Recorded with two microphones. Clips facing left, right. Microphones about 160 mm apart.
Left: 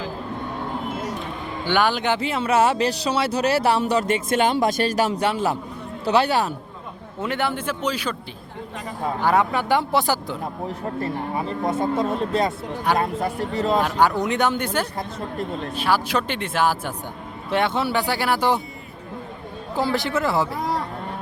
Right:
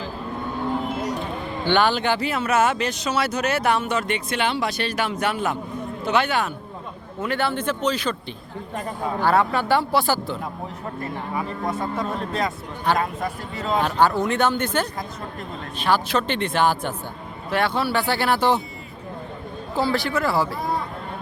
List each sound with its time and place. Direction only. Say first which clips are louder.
1.6 s speech: right 1 dB; 10° left (ahead or behind); by 6.5 s 35° left (ahead or behind)
7.2 s speech: right 1 dB; 15° left (ahead or behind)
9.2 s speech: even; 15° left (ahead or behind)
11.0 s speech: left 1 dB; 30° left (ahead or behind)
13.8 s speech: even; 15° left (ahead or behind)
17.5 s speech: left 1 dB; 20° left (ahead or behind)
19.7 s speech: even; 15° left (ahead or behind)